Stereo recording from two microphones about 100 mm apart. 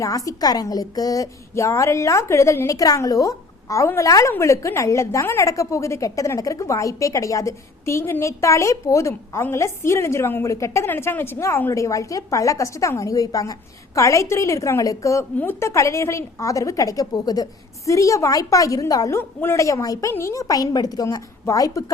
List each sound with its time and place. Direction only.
0.0 s a woman's voice: 35° left (ahead or behind)